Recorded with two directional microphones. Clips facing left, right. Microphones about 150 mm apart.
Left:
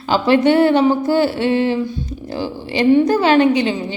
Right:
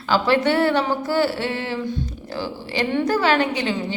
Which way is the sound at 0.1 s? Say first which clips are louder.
Left 5 dB; 20° left (ahead or behind).